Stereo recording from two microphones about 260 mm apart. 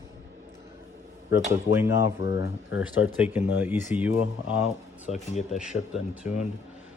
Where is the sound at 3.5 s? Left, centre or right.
Centre.